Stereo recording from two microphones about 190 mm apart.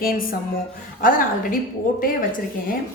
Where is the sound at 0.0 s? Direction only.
50° left (ahead or behind).